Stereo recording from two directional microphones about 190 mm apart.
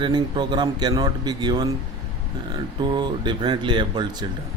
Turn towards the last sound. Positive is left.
turn(degrees=-25)  # may be behind; listen again after turning